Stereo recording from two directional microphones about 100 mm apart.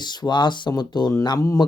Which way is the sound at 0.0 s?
45° left (ahead or behind).